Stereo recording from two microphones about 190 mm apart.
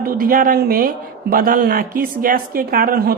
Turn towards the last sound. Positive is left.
turn(degrees=-55)  # may be behind; listen again after turning